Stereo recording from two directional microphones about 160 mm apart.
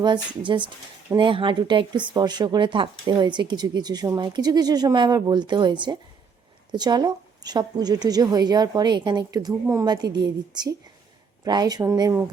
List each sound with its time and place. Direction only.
0.0 s speech: 30° right (ahead or behind)